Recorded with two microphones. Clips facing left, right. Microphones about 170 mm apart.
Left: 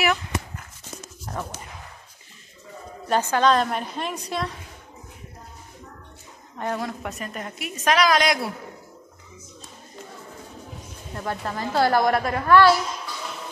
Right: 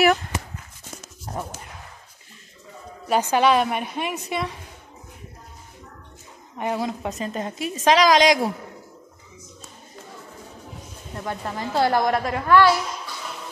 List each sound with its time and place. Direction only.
0.0 s dog: 45° right (ahead or behind)
3.1 s a woman's voice: 15° right (ahead or behind)
6.6 s a woman's voice: 15° right (ahead or behind)
8.0 s a man's voice: 90° right
11.2 s a woman's voice: 20° right (ahead or behind)